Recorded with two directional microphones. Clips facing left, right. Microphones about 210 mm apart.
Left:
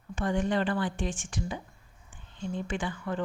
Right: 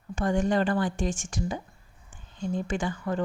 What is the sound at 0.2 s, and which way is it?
A woman's voice, 45° right (ahead or behind).